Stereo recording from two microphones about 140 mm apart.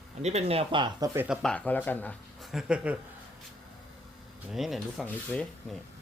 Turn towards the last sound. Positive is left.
turn(degrees=5)  # may be behind; listen again after turning